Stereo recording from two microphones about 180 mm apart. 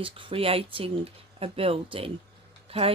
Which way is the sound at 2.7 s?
30° right (ahead or behind).